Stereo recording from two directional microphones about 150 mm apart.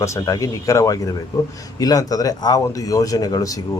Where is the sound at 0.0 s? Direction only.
20° left (ahead or behind).